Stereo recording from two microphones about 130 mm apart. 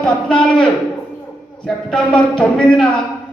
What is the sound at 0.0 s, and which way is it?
Music, 5° left (ahead or behind).